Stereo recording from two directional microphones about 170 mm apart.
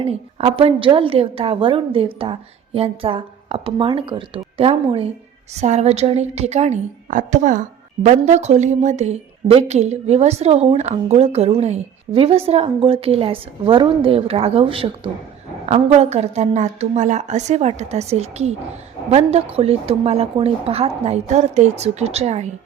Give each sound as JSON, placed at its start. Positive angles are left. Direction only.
{"t": 0.0, "sound": "a woman's voice", "side_deg": -35}
{"t": 5.5, "sound": "a woman's voice", "side_deg": -40}